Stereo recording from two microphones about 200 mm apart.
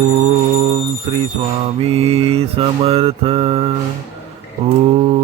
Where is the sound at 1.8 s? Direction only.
30° right (ahead or behind).